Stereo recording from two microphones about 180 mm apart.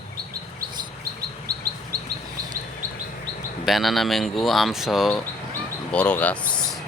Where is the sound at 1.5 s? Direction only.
60° right (ahead or behind).